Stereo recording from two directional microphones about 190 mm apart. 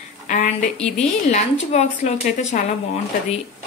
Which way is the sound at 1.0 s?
35° left (ahead or behind).